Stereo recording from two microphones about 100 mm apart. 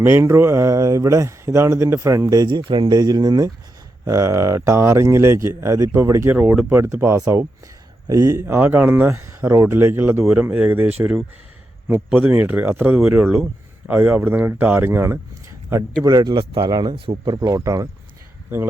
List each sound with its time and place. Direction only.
0.0 s speech: 25° right (ahead or behind); by 2.9 s 55° right (ahead or behind)
2.9 s speech: 45° right (ahead or behind); by 6.3 s 25° right (ahead or behind)
6.3 s speech: 10° right (ahead or behind)
12.1 s speech: 20° right (ahead or behind)
16.0 s speech: 40° right (ahead or behind)
16.3 s speech: 55° right (ahead or behind)
17.3 s speech: 35° right (ahead or behind)